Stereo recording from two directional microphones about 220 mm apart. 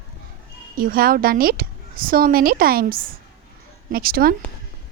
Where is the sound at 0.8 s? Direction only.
40° right (ahead or behind).